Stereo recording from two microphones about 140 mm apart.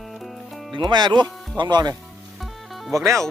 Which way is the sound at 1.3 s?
Centre (ahead or behind).